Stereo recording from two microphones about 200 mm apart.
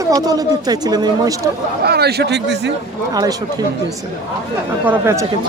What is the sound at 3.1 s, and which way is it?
Speech, 20° right (ahead or behind).